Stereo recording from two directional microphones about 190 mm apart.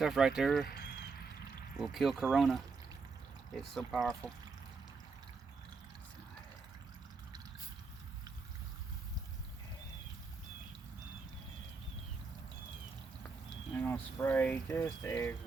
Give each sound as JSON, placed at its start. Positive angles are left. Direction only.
{"t": 0.0, "sound": "speech", "side_deg": 0}
{"t": 1.7, "sound": "speech", "side_deg": 0}
{"t": 3.6, "sound": "speech", "side_deg": 0}
{"t": 13.7, "sound": "speech", "side_deg": 10}